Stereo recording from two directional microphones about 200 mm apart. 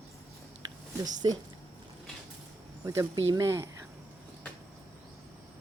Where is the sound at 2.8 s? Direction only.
15° right (ahead or behind).